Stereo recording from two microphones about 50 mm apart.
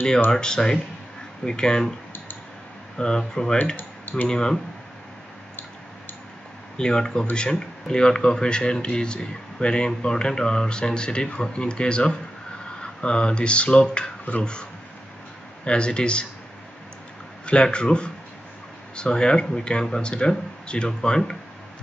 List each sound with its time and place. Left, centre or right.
0.3 s speech: centre
3.0 s speech: centre
6.8 s speech: centre
17.5 s speech: left